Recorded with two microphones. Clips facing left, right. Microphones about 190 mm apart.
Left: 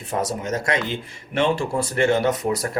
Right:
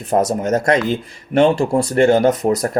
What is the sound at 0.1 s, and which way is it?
Speech, 45° right (ahead or behind).